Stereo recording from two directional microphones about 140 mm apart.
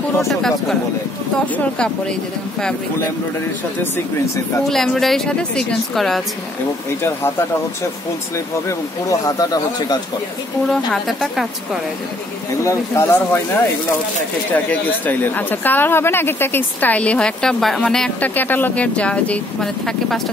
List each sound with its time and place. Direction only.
0.3 s a woman's voice: centre (ahead or behind)
4.6 s a woman's voice: 5° left (ahead or behind)
7.0 s speech: 15° left (ahead or behind)
8.6 s speech: 25° left (ahead or behind)
10.7 s a woman's voice: 5° left (ahead or behind)
12.6 s speech: 20° left (ahead or behind)
14.5 s speech: 10° left (ahead or behind)